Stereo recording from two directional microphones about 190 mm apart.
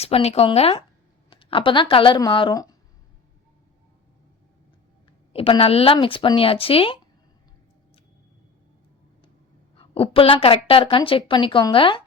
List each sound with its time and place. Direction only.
0.0 s a woman's voice: 30° left (ahead or behind)
5.3 s a woman's voice: 30° left (ahead or behind)
9.7 s a woman's voice: 30° left (ahead or behind)